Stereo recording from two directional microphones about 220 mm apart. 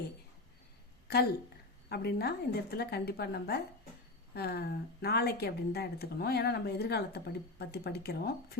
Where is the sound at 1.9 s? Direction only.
45° left (ahead or behind).